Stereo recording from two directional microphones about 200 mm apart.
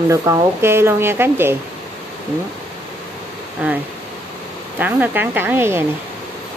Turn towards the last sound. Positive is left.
turn(degrees=-10)  # may be behind; listen again after turning